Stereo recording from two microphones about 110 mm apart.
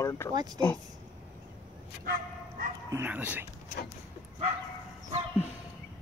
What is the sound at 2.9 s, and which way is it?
Speech, 15° right (ahead or behind).